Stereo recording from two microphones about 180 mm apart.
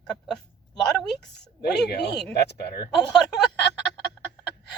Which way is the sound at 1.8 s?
70° left (ahead or behind).